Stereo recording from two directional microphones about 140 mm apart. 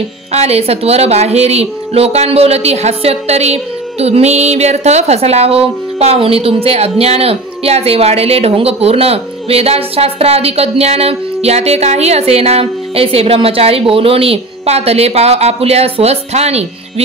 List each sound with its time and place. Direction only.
0.3 s a woman's voice: 50° right (ahead or behind)